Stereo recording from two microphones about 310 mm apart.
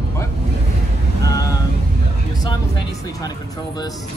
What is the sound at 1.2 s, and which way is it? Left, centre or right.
Vehicle, centre.